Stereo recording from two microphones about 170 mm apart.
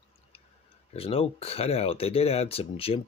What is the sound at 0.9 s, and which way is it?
Speech, 35° left (ahead or behind).